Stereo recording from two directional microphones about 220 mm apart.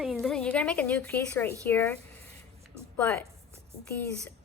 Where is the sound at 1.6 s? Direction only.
10° left (ahead or behind).